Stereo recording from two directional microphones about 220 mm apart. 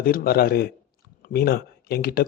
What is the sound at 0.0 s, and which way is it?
Speech, 40° left (ahead or behind).